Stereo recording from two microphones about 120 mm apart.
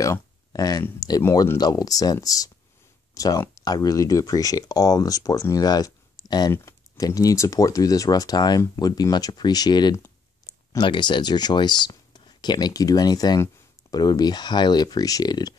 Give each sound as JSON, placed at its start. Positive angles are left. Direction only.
{"t": 0.0, "sound": "a sound", "side_deg": 30}
{"t": 0.9, "sound": "speech", "side_deg": 30}
{"t": 6.5, "sound": "speech", "side_deg": 25}